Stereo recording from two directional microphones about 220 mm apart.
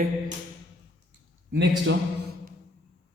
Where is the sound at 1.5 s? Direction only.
55° right (ahead or behind).